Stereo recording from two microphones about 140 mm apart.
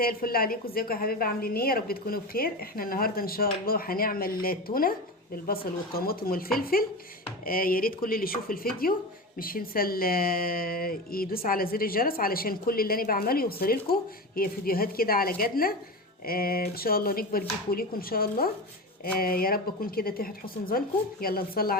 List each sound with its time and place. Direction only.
0.0 s speech: 90° left